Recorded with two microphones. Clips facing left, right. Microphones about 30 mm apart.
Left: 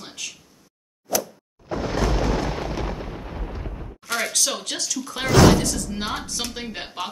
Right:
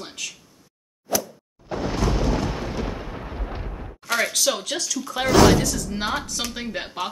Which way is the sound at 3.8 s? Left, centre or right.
Centre.